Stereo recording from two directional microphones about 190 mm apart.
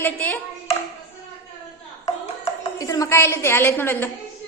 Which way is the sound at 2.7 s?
15° left (ahead or behind).